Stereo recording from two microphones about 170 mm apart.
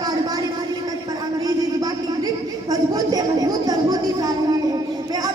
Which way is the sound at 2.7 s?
20° right (ahead or behind).